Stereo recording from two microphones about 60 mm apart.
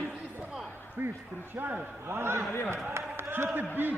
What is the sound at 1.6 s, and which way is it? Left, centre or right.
Speech, right.